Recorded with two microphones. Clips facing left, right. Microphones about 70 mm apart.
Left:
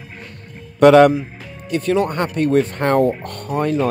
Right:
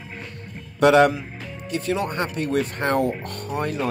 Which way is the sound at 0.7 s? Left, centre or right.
Left.